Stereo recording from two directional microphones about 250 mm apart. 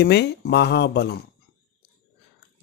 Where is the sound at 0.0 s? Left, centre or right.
Left.